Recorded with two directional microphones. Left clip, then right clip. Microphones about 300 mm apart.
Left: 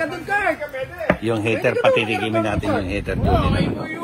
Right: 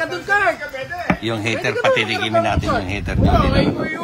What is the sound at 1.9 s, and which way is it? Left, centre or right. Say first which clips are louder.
Speech: right 1 dB; right.